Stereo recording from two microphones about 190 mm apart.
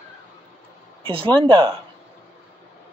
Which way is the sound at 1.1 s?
25° right (ahead or behind).